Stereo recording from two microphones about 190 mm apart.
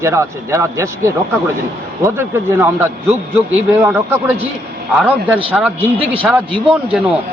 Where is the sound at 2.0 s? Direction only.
10° right (ahead or behind).